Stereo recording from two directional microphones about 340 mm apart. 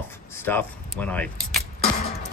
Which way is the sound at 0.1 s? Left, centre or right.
Centre.